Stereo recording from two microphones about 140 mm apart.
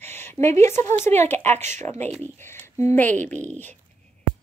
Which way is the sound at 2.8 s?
15° left (ahead or behind).